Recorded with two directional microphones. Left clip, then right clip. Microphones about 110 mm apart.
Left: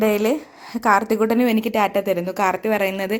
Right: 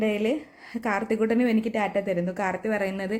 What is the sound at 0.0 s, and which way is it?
A woman's voice, 25° left (ahead or behind).